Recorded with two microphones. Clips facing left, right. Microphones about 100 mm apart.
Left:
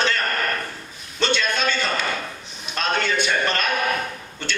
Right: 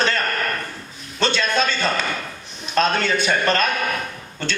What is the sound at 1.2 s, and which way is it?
Speech, 40° right (ahead or behind).